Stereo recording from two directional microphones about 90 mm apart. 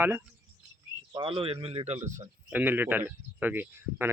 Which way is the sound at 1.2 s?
75° right (ahead or behind).